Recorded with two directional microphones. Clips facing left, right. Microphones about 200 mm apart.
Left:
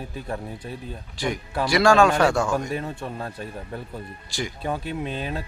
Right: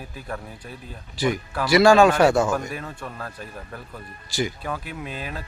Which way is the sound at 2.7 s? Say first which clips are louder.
Left 4 dB; 25° left (ahead or behind).